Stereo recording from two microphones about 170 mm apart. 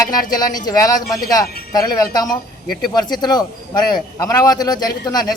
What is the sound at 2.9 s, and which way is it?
A man's voice, 25° left (ahead or behind).